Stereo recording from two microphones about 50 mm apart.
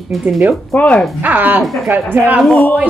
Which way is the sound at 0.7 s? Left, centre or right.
Left.